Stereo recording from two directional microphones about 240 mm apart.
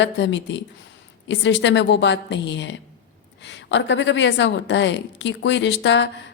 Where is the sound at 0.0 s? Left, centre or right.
Left.